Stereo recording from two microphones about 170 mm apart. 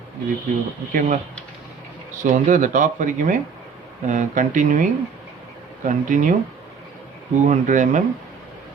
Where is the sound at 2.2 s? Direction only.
45° right (ahead or behind).